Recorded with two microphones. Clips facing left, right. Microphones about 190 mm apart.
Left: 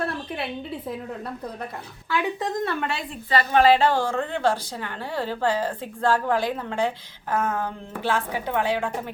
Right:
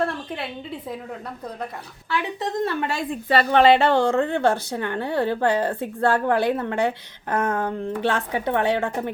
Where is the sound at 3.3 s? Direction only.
65° right (ahead or behind).